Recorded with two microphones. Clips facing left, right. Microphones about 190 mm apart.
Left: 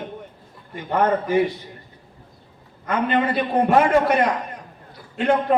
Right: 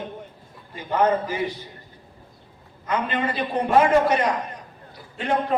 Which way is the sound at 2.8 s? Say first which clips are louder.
Left 4 dB; 50° left (ahead or behind).